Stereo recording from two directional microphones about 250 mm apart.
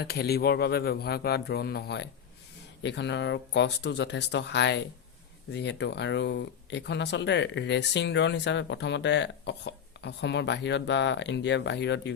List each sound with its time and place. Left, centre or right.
0.0 s speech: left